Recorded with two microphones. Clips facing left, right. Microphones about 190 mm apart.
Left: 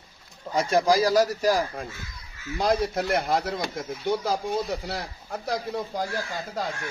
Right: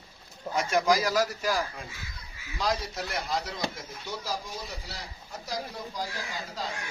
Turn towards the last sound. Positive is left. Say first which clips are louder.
# left 5 dB
turn(degrees=55)  # may be behind; listen again after turning